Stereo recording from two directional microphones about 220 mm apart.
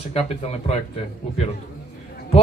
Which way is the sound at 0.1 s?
30° left (ahead or behind).